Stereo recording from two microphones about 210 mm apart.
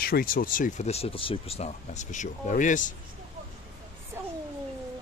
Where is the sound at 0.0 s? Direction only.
45° left (ahead or behind).